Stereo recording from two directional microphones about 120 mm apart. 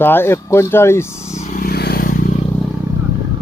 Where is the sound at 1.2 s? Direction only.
65° left (ahead or behind).